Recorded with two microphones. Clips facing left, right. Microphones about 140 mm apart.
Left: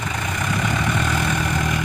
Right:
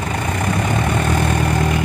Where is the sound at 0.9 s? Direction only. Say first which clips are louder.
Right 4 dB; 40° right (ahead or behind).